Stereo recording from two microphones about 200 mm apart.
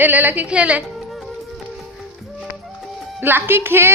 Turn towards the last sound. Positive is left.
turn(degrees=-10)  # may be behind; listen again after turning